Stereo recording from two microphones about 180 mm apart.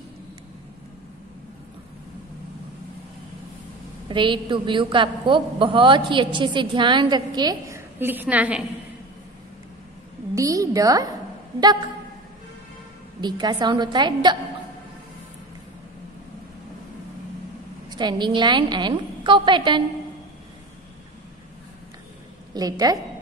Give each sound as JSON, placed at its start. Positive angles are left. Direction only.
{"t": 4.1, "sound": "a woman's voice", "side_deg": -25}
{"t": 8.0, "sound": "a woman's voice", "side_deg": -10}
{"t": 10.3, "sound": "a sound", "side_deg": -20}
{"t": 11.6, "sound": "a woman's voice", "side_deg": -25}
{"t": 13.2, "sound": "a woman's voice", "side_deg": -25}
{"t": 17.8, "sound": "a woman's voice", "side_deg": -25}
{"t": 22.5, "sound": "a woman's voice", "side_deg": -20}